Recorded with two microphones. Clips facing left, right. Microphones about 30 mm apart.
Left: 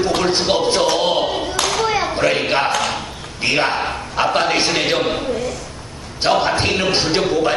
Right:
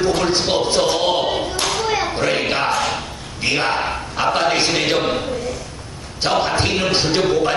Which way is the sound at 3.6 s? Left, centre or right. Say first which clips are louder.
Even; centre.